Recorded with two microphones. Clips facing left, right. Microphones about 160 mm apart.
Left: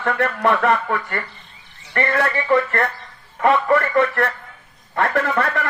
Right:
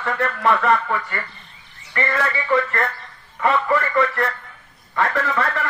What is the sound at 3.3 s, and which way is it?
A man's voice, 60° left (ahead or behind).